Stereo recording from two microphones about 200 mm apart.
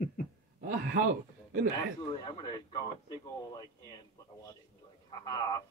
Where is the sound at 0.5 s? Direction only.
45° right (ahead or behind).